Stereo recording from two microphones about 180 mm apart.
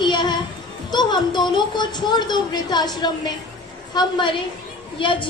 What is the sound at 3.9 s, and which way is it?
A woman's voice, 25° left (ahead or behind).